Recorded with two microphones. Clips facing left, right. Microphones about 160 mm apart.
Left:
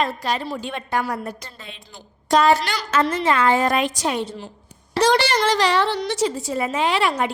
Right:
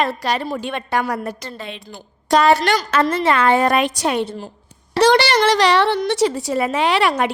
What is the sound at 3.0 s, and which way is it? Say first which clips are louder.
Speech: right 3 dB; 45° right (ahead or behind).